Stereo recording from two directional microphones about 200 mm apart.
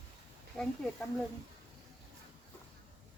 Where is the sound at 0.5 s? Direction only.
5° left (ahead or behind).